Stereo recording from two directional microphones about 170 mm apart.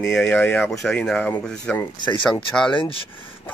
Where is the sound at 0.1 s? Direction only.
10° left (ahead or behind).